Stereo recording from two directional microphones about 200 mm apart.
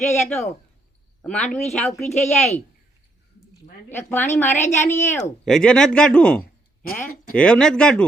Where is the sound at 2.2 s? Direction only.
35° left (ahead or behind).